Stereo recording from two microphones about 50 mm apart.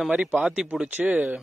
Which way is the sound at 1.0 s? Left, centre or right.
Right.